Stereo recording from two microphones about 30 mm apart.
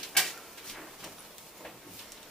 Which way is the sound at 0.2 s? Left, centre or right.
Centre.